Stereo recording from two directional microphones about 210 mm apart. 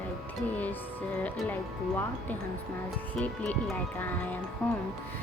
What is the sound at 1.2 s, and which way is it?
Speech, 5° left (ahead or behind).